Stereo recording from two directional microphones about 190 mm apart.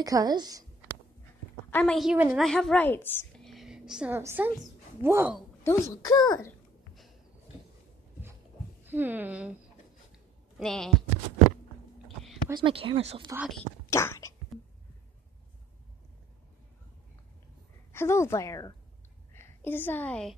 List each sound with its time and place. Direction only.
0.0 s speech: 20° right (ahead or behind)
1.7 s a woman's voice: 10° left (ahead or behind)
2.0 s a woman's voice: 5° right (ahead or behind)
5.6 s a child's voice: 15° left (ahead or behind)
8.8 s speech: 10° right (ahead or behind)
10.1 s a sound: centre (ahead or behind)
12.4 s speech: 25° right (ahead or behind)
13.8 s whispering: 15° left (ahead or behind)
17.9 s a woman's voice: 15° left (ahead or behind)